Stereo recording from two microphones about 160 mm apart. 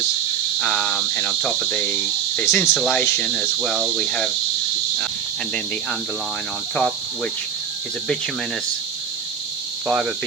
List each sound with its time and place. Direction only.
0.6 s speech: 5° left (ahead or behind)
2.7 s cricket: 5° left (ahead or behind)
3.0 s speech: 10° left (ahead or behind)
3.4 s cricket: centre (ahead or behind)
9.8 s cricket: 5° right (ahead or behind)